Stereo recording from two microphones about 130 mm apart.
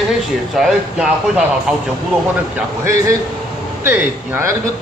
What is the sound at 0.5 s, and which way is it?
A man's voice, 5° right (ahead or behind).